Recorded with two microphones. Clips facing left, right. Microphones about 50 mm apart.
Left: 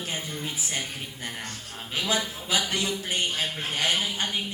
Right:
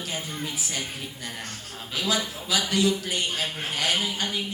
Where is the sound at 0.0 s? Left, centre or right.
Left.